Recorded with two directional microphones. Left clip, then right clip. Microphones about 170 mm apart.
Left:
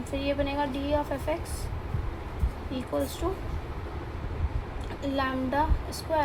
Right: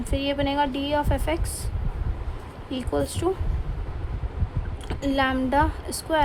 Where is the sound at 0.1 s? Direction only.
50° right (ahead or behind).